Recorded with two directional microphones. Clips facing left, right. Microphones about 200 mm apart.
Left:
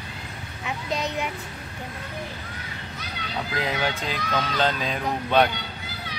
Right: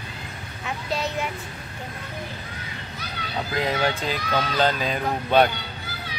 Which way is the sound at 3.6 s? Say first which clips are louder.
Right 4 dB; centre (ahead or behind).